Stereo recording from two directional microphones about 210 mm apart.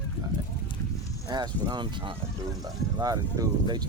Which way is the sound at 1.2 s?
20° right (ahead or behind).